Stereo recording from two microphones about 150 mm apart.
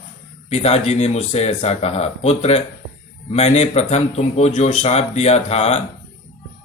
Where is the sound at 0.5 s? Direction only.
45° left (ahead or behind).